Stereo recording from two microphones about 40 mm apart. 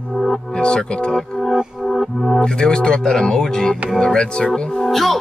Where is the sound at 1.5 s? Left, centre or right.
Centre.